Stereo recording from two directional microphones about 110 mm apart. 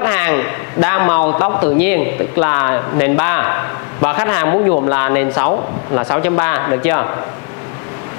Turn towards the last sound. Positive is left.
turn(degrees=25)  # may be behind; listen again after turning